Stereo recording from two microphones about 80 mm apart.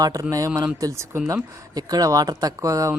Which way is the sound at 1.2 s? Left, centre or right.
Right.